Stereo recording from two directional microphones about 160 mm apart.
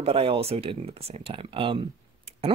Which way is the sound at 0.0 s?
35° right (ahead or behind).